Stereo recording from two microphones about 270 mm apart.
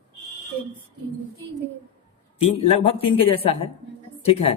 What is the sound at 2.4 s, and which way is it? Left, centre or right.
A woman's voice, left.